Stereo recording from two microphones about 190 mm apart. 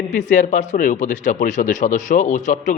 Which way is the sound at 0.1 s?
40° left (ahead or behind).